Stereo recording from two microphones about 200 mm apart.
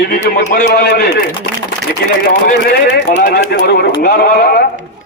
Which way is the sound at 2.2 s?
50° left (ahead or behind).